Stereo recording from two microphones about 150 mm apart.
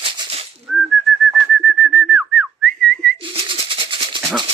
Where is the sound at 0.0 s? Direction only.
40° right (ahead or behind).